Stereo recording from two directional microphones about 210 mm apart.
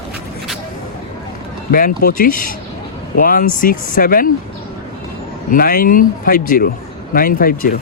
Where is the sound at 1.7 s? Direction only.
40° left (ahead or behind).